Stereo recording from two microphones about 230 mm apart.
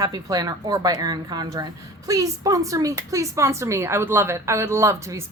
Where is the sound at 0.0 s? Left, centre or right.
Centre.